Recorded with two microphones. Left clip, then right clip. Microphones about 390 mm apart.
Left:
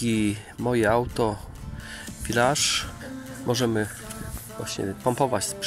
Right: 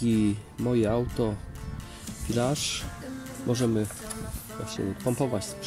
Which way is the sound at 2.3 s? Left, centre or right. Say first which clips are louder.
Left 7 dB; centre.